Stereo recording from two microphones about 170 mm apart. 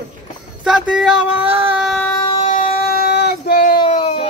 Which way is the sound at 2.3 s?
45° left (ahead or behind).